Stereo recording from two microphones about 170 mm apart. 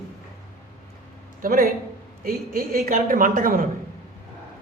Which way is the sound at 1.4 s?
55° right (ahead or behind).